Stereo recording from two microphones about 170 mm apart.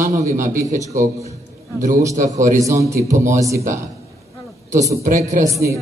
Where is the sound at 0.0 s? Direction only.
45° right (ahead or behind).